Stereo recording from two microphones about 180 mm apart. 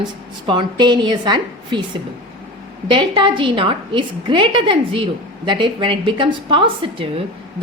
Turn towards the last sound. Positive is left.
turn(degrees=-30)  # may be behind; listen again after turning